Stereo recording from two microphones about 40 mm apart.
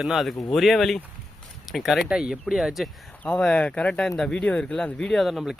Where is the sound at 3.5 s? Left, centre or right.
Left.